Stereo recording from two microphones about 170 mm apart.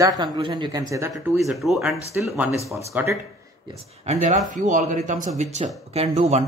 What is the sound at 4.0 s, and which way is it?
Speech, 40° right (ahead or behind).